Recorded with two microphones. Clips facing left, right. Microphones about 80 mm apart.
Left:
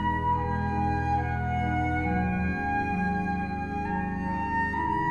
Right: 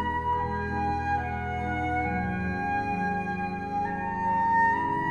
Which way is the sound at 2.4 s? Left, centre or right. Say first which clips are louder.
Left 1 dB; centre.